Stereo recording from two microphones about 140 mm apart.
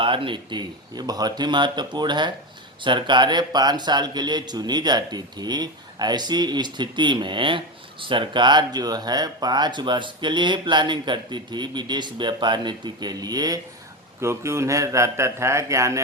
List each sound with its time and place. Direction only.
0.0 s a man's voice: 40° right (ahead or behind); by 16.0 s 20° right (ahead or behind)